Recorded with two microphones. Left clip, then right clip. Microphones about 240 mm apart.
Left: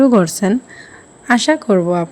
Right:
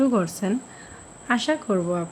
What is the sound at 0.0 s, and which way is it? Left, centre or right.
A woman's voice, left.